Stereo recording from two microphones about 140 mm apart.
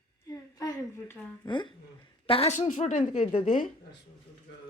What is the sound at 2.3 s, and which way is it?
Speech, 50° left (ahead or behind).